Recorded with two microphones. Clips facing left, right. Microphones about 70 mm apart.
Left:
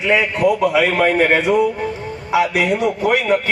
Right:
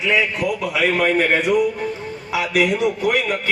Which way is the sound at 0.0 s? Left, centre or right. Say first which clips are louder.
Left 4 dB; left.